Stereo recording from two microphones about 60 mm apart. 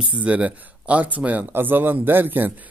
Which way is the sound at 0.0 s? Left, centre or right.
Centre.